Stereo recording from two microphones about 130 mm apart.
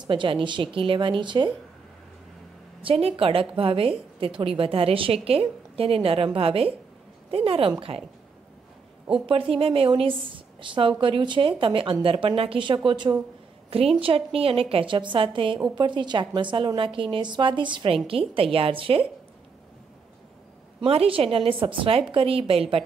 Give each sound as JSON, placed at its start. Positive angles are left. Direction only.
{"t": 0.0, "sound": "a woman's voice", "side_deg": -40}
{"t": 2.8, "sound": "a woman's voice", "side_deg": -45}
{"t": 9.2, "sound": "a woman's voice", "side_deg": -45}
{"t": 13.7, "sound": "a woman's voice", "side_deg": -50}
{"t": 20.8, "sound": "a woman's voice", "side_deg": -50}